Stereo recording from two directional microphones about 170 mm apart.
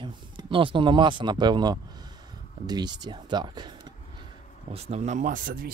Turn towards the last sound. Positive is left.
turn(degrees=-55)  # may be behind; listen again after turning